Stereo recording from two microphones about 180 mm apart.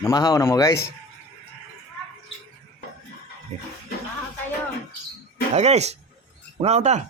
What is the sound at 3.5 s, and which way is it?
Speech, 35° right (ahead or behind).